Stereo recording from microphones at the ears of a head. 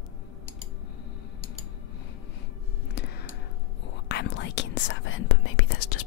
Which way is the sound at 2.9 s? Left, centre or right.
Left.